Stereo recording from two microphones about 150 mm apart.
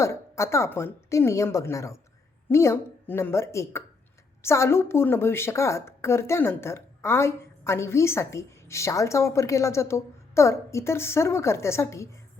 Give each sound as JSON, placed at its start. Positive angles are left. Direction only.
{"t": 0.0, "sound": "a woman's voice", "side_deg": 20}